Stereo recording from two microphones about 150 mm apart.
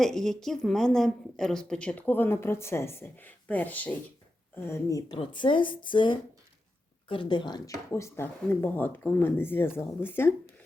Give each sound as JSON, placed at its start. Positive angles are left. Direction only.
{"t": 0.0, "sound": "a woman's voice", "side_deg": 5}
{"t": 5.1, "sound": "a woman's voice", "side_deg": 35}